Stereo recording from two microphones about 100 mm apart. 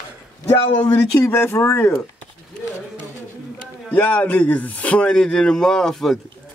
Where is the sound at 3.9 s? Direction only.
15° left (ahead or behind).